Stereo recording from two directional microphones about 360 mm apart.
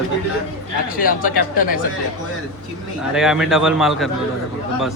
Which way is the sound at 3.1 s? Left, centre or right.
Centre.